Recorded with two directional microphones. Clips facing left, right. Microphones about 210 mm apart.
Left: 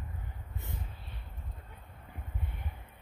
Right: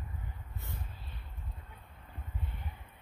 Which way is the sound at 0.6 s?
20° left (ahead or behind).